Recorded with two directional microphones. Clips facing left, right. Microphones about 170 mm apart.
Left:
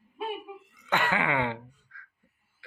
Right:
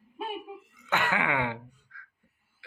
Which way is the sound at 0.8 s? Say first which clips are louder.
Left 1 dB; 10° right (ahead or behind).